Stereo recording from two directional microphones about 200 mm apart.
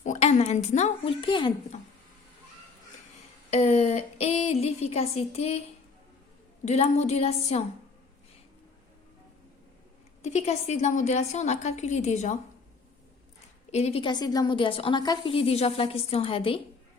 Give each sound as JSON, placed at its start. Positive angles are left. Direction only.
{"t": 0.0, "sound": "speech", "side_deg": 35}
{"t": 3.5, "sound": "a woman's voice", "side_deg": 30}
{"t": 6.7, "sound": "a woman's voice", "side_deg": 35}
{"t": 10.2, "sound": "a woman's voice", "side_deg": 35}
{"t": 13.7, "sound": "a woman's voice", "side_deg": 35}